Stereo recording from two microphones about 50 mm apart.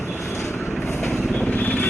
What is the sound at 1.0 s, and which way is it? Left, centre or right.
Vehicle, centre.